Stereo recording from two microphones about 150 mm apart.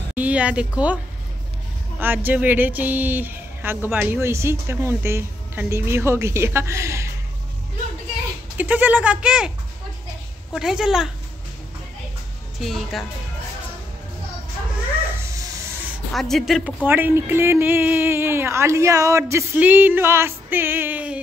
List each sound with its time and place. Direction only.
0.1 s speech: 10° right (ahead or behind)
2.0 s speech: 15° right (ahead or behind)
8.5 s speech: 10° right (ahead or behind)
10.5 s speech: 5° right (ahead or behind)
12.5 s speech: centre (ahead or behind)
16.1 s speech: centre (ahead or behind)
16.8 s speech: 15° right (ahead or behind)